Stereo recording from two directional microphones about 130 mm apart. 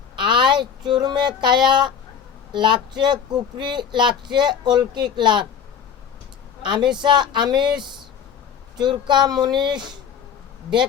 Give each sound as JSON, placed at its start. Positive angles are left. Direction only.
{"t": 0.2, "sound": "speech", "side_deg": -35}
{"t": 6.6, "sound": "speech", "side_deg": -35}